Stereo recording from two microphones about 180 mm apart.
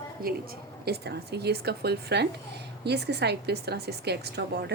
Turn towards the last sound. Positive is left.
turn(degrees=-65)  # may be behind; listen again after turning